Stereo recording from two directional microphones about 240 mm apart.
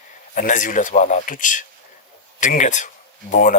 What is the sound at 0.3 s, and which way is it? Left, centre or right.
Speech, left.